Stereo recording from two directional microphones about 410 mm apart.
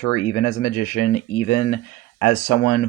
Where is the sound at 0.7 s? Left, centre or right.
Centre.